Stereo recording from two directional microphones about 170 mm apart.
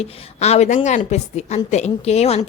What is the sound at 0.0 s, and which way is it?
A woman's voice, 40° left (ahead or behind).